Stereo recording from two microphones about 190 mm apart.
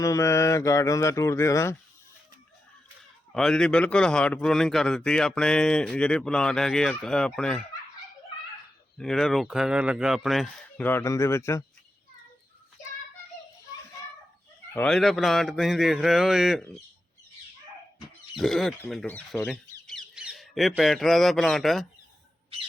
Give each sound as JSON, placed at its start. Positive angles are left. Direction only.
{"t": 0.0, "sound": "speech", "side_deg": 15}
{"t": 3.3, "sound": "a man's voice", "side_deg": 5}
{"t": 9.0, "sound": "a man's voice", "side_deg": 0}
{"t": 14.7, "sound": "a man's voice", "side_deg": 5}
{"t": 18.3, "sound": "a man's voice", "side_deg": 0}